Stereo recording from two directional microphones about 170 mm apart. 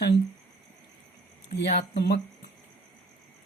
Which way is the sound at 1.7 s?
75° left (ahead or behind).